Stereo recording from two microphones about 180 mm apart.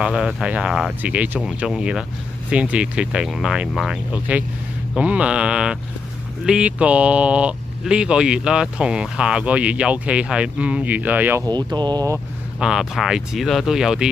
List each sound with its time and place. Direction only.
0.0 s speech: 5° right (ahead or behind)
11.4 s speech: 25° right (ahead or behind)
12.5 s speech: 5° right (ahead or behind)